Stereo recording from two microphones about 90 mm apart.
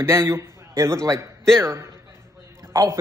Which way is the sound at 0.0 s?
35° right (ahead or behind).